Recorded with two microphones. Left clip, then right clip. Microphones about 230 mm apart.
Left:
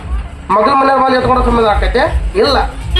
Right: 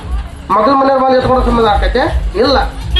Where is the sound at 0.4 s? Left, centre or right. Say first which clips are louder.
Even; left.